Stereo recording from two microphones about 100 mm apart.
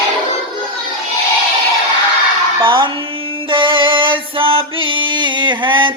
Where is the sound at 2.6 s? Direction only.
55° right (ahead or behind).